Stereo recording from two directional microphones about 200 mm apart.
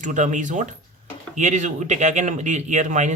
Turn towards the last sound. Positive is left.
turn(degrees=-35)  # may be behind; listen again after turning